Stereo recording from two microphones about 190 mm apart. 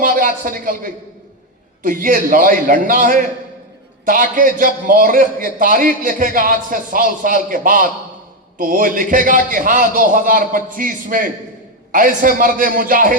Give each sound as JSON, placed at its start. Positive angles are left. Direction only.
{"t": 0.0, "sound": "a man's voice", "side_deg": -45}